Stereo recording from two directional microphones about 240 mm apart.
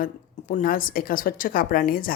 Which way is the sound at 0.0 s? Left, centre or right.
Left.